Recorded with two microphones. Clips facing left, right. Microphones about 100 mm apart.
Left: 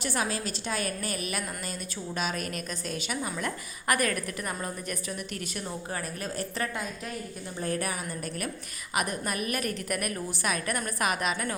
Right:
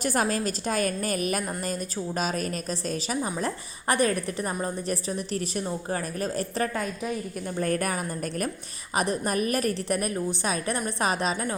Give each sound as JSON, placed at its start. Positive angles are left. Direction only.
{"t": 0.0, "sound": "a woman's voice", "side_deg": -45}
{"t": 7.6, "sound": "a woman's voice", "side_deg": -50}
{"t": 9.0, "sound": "a woman's voice", "side_deg": -35}